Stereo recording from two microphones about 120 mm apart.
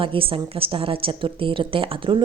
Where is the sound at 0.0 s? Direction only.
50° right (ahead or behind).